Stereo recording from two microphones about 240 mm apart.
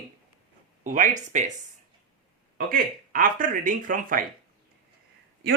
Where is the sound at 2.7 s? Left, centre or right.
Right.